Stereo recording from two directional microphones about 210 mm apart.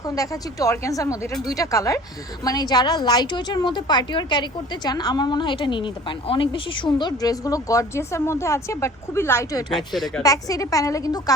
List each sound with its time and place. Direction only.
0.0 s a woman's voice: 15° left (ahead or behind)
9.9 s speech: centre (ahead or behind)
10.2 s a woman's voice: 15° left (ahead or behind)